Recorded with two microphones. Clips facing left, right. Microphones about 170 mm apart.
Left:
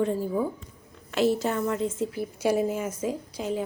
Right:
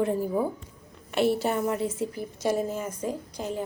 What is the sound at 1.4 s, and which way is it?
Speech, 15° right (ahead or behind).